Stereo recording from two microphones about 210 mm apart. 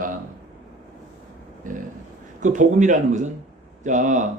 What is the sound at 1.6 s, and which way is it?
Speech, 40° right (ahead or behind).